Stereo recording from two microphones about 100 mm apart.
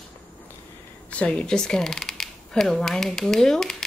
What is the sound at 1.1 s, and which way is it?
Speech, 10° left (ahead or behind).